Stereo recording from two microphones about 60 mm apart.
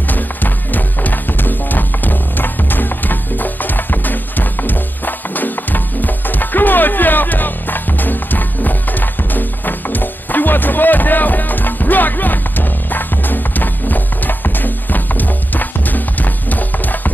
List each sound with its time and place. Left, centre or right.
0.1 s music: left